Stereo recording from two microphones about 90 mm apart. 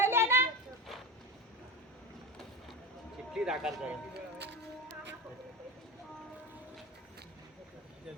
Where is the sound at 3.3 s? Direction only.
5° right (ahead or behind).